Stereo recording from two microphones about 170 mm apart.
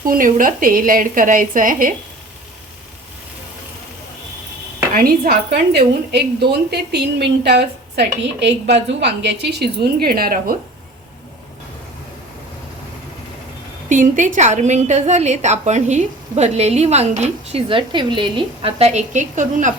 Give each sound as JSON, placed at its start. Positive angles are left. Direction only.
{"t": 0.0, "sound": "a woman's voice", "side_deg": -55}
{"t": 4.9, "sound": "a woman's voice", "side_deg": -60}
{"t": 13.9, "sound": "a woman's voice", "side_deg": -50}